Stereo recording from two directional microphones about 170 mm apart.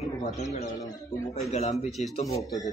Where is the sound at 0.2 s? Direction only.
40° left (ahead or behind).